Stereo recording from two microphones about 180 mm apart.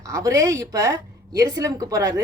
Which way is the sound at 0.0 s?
20° right (ahead or behind).